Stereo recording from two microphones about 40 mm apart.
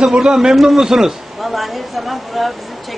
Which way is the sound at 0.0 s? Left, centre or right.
Centre.